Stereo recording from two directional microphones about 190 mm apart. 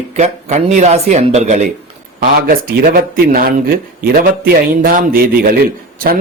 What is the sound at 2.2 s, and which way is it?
Speech, 50° right (ahead or behind).